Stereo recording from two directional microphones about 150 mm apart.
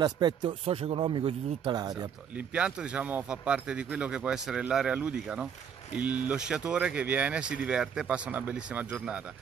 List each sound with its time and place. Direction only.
0.0 s a man's voice: 30° right (ahead or behind)
1.8 s speech: 25° right (ahead or behind)
2.3 s speech: 5° right (ahead or behind)